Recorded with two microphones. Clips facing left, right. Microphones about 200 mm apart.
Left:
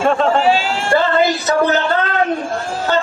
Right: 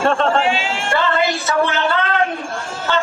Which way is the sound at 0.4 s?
40° left (ahead or behind).